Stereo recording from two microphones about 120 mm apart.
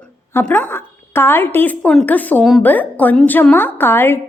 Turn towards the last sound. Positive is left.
turn(degrees=20)  # may be behind; listen again after turning